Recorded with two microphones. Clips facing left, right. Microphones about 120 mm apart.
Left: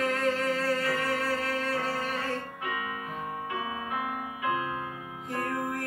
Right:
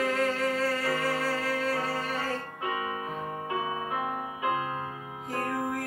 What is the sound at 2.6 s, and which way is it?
Music, 30° right (ahead or behind).